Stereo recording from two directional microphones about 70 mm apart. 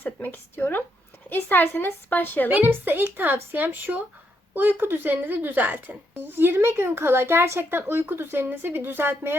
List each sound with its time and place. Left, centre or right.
0.0 s a woman's voice: left
2.5 s a woman's voice: right